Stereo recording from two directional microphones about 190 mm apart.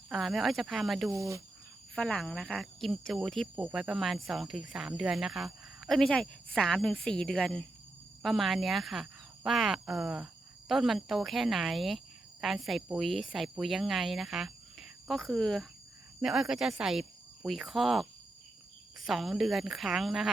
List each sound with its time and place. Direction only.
0.1 s speech: centre (ahead or behind)
1.1 s speech: 15° right (ahead or behind)
2.0 s speech: 5° left (ahead or behind)